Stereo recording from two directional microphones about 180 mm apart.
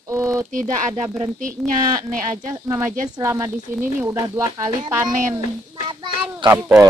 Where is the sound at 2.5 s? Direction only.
15° right (ahead or behind).